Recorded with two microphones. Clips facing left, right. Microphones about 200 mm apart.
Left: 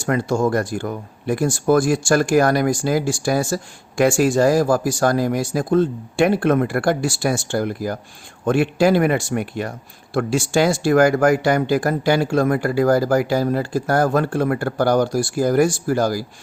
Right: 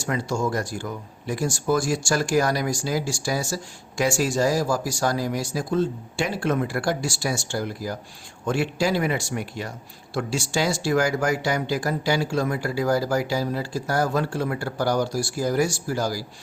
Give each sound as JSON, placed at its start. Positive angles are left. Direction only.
{"t": 0.0, "sound": "speech", "side_deg": 55}